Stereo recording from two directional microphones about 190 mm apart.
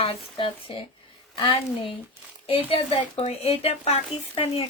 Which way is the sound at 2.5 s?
30° left (ahead or behind).